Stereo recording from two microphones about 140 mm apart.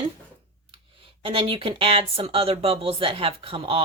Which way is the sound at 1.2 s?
40° right (ahead or behind).